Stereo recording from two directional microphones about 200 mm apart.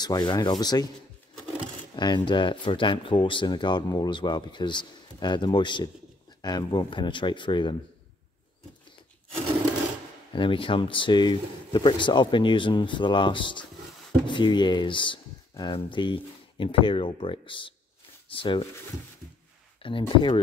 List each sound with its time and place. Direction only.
0.0 s speech: 20° left (ahead or behind)
2.0 s speech: 20° left (ahead or behind)
10.3 s speech: 25° left (ahead or behind)
19.8 s speech: 25° left (ahead or behind)